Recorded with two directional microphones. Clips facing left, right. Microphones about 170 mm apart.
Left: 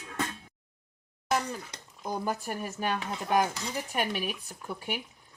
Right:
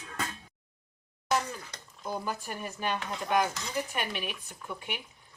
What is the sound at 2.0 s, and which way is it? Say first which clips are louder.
Speech: left 3 dB; 45° left (ahead or behind).